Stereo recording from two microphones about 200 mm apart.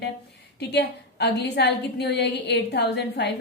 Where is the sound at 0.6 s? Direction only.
55° left (ahead or behind).